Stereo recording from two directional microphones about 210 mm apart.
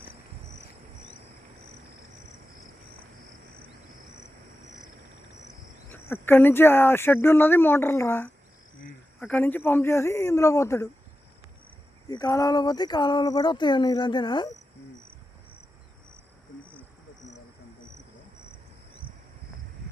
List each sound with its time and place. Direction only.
5.9 s speech: 10° left (ahead or behind)
12.0 s speech: 15° left (ahead or behind)